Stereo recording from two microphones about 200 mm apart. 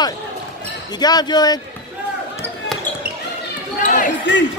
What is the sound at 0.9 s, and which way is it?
Speech, 20° left (ahead or behind).